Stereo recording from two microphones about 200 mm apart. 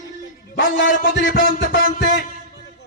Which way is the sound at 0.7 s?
45° left (ahead or behind).